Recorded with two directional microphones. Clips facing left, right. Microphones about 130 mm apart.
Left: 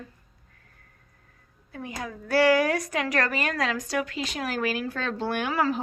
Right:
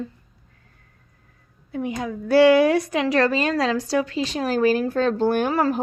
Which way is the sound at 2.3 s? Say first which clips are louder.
Right 7 dB; 25° right (ahead or behind).